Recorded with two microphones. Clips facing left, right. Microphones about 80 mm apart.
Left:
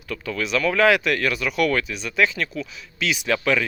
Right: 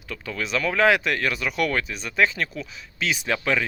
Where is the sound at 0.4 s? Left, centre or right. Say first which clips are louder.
Left 2 dB; right.